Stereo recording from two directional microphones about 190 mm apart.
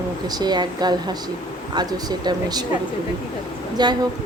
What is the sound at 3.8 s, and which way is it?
Speech, 20° right (ahead or behind).